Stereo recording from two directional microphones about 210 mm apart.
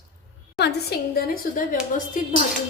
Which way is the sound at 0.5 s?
50° left (ahead or behind).